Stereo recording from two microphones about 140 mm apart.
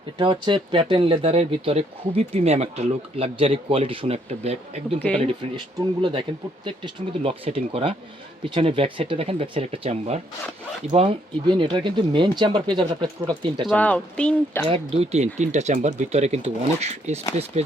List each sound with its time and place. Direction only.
0.2 s speech: 35° right (ahead or behind)
5.2 s speech: 35° right (ahead or behind)
13.7 s speech: 10° left (ahead or behind)
14.7 s speech: 45° right (ahead or behind)